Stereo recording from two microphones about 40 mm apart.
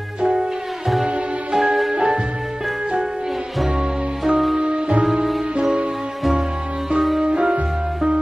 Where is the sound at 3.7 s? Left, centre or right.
Centre.